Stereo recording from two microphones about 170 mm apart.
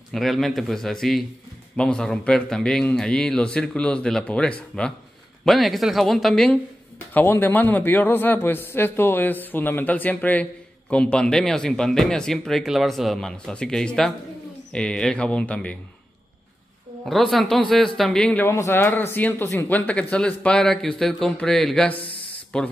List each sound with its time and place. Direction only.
0.1 s a man's voice: centre (ahead or behind)
17.0 s speech: centre (ahead or behind)
21.9 s a sound: 30° left (ahead or behind)